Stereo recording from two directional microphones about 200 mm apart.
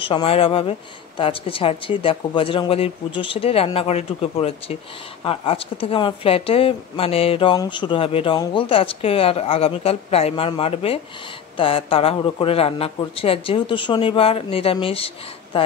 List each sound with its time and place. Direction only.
0.0 s speech: 25° left (ahead or behind)